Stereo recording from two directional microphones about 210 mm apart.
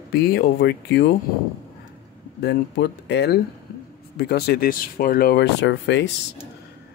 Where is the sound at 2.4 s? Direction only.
50° left (ahead or behind).